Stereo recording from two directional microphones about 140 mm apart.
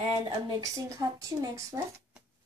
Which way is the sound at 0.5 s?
25° right (ahead or behind).